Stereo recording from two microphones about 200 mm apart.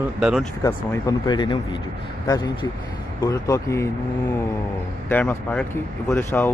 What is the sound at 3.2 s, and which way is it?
Speech, 15° left (ahead or behind).